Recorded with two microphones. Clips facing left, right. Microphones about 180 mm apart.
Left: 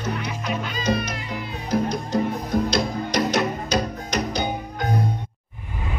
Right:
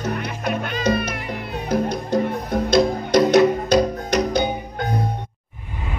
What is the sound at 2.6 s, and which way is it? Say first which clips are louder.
Music: right 6 dB; 55° right (ahead or behind).